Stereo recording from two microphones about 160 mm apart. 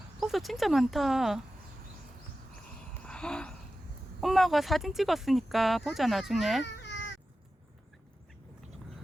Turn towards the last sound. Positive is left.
turn(degrees=90)